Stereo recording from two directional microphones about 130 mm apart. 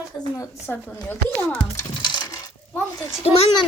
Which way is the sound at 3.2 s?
50° left (ahead or behind).